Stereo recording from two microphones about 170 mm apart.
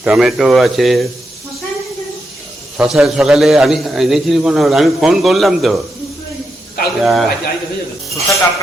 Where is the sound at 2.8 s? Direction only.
5° right (ahead or behind).